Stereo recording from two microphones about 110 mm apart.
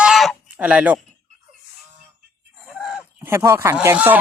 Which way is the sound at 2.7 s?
Centre (ahead or behind).